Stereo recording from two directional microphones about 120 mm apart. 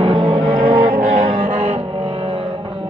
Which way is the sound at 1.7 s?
55° right (ahead or behind).